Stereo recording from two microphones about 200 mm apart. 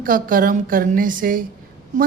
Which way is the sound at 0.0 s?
45° right (ahead or behind).